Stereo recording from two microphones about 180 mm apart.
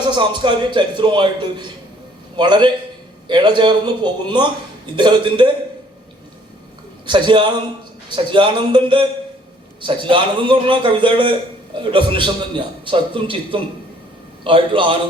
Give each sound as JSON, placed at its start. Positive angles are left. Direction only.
{"t": 0.0, "sound": "a man's voice", "side_deg": -25}
{"t": 7.1, "sound": "a man's voice", "side_deg": -25}